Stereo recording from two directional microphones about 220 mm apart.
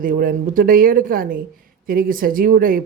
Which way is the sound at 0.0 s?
40° right (ahead or behind).